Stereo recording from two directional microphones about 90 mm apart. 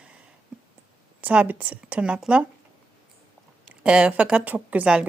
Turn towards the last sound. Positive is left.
turn(degrees=-10)  # may be behind; listen again after turning